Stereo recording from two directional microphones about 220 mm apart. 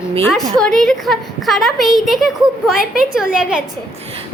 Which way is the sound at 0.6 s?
Centre (ahead or behind).